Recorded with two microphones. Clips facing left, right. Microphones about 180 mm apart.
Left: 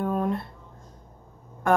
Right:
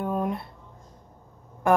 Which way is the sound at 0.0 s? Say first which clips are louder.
Left 1 dB; 15° right (ahead or behind).